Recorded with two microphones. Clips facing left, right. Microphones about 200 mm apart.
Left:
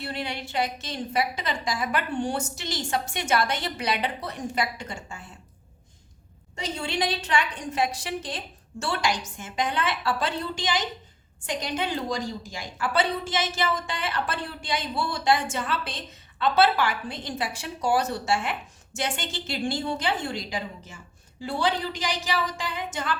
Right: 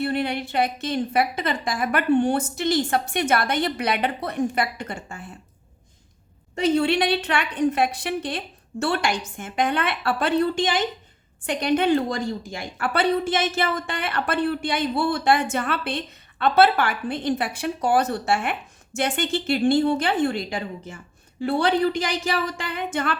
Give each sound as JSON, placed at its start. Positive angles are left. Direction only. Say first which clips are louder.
{"t": 0.0, "sound": "a woman's voice", "louder": "right 8 dB", "side_deg": -55}
{"t": 6.6, "sound": "a woman's voice", "louder": "right 9 dB", "side_deg": -60}